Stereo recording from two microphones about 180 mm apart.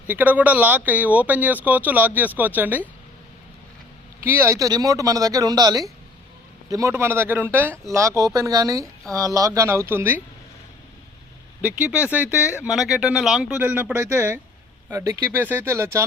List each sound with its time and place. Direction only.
0.1 s speech: 10° right (ahead or behind)
4.2 s speech: 15° right (ahead or behind)
11.6 s speech: 10° right (ahead or behind)